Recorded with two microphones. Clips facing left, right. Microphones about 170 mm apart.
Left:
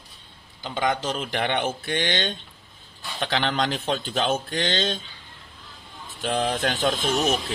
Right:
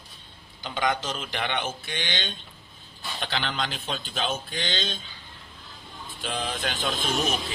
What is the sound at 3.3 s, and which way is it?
Speech, 75° left (ahead or behind).